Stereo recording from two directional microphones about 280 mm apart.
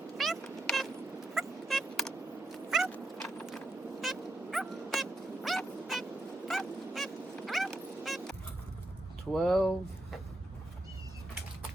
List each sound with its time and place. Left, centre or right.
0.2 s cat: centre
1.3 s vehicle: centre
2.6 s cat: centre
4.0 s dog: centre
6.5 s vehicle: centre
9.3 s speech: centre